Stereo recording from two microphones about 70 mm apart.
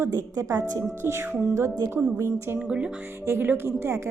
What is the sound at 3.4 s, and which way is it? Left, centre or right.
Speech, right.